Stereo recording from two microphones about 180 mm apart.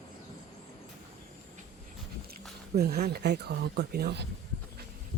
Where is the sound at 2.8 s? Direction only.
60° right (ahead or behind).